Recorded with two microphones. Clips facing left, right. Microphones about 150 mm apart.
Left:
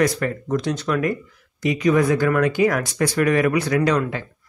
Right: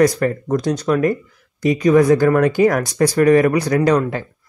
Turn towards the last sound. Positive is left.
turn(degrees=-40)  # may be behind; listen again after turning